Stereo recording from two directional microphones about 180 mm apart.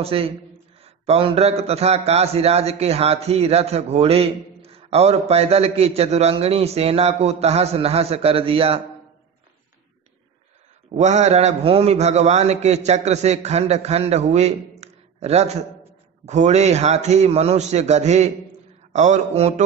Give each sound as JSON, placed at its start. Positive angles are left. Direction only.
{"t": 0.0, "sound": "a man's voice", "side_deg": -30}
{"t": 10.9, "sound": "a man's voice", "side_deg": -40}